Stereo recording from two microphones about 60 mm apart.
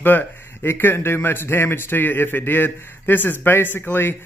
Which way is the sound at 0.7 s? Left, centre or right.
Left.